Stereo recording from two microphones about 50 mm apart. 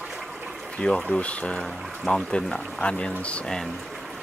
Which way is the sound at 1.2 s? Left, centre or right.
Left.